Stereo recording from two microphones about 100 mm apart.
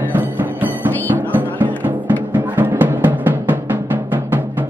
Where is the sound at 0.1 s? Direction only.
15° right (ahead or behind).